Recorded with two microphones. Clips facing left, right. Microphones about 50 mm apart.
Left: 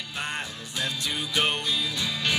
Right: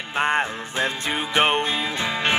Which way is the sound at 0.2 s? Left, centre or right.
Right.